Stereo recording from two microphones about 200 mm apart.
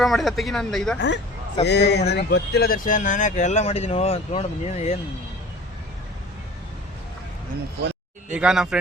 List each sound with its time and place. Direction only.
0.0 s speech: centre (ahead or behind)
0.9 s speech: 60° left (ahead or behind); by 4.9 s 35° left (ahead or behind)
8.3 s speech: 5° right (ahead or behind)